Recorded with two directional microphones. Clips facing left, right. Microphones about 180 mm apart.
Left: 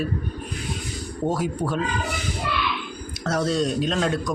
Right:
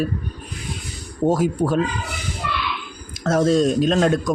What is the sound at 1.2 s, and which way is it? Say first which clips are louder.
Speech: right 6 dB; 45° right (ahead or behind).